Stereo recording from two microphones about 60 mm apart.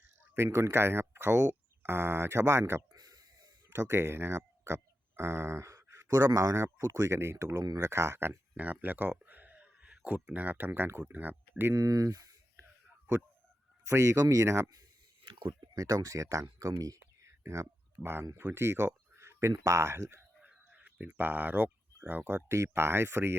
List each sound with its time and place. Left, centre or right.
0.3 s speech: right
2.9 s a sound: right
3.7 s speech: right
8.5 s a sound: right
10.2 s speech: right
11.7 s speech: right
13.8 s speech: right
15.7 s speech: right
17.4 s speech: right
20.8 s speech: right